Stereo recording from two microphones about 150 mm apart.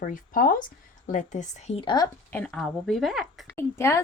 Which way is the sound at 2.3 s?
5° left (ahead or behind).